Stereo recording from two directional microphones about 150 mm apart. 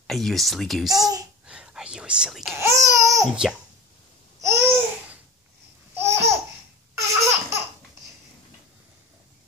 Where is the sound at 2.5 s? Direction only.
20° right (ahead or behind).